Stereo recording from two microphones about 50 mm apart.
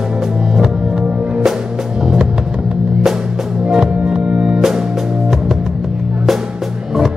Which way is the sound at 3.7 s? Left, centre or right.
Centre.